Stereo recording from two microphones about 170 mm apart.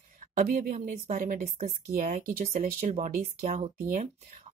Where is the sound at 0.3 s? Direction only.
50° right (ahead or behind).